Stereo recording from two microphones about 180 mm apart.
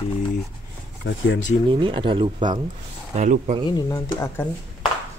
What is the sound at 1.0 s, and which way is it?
Speech, 90° left.